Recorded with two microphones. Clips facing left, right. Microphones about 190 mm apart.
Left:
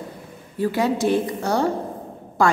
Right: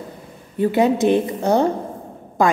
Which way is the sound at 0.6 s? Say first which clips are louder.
Right 5 dB; 20° right (ahead or behind).